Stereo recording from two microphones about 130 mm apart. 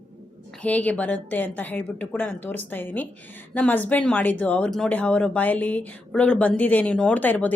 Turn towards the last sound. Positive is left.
turn(degrees=10)  # may be behind; listen again after turning